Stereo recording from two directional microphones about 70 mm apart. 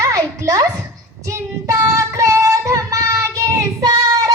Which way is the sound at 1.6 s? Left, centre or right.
Right.